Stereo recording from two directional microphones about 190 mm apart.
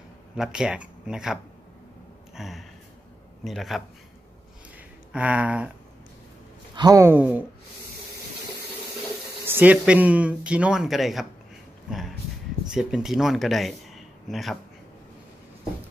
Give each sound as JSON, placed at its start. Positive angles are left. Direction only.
{"t": 0.4, "sound": "speech", "side_deg": -5}
{"t": 2.3, "sound": "a sound", "side_deg": 0}
{"t": 3.4, "sound": "speech", "side_deg": 0}
{"t": 5.1, "sound": "speech", "side_deg": -5}
{"t": 6.7, "sound": "speech", "side_deg": -20}
{"t": 9.5, "sound": "speech", "side_deg": -10}
{"t": 12.7, "sound": "speech", "side_deg": -5}